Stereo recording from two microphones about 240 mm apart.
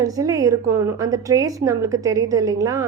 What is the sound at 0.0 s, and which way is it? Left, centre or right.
A woman's voice, centre.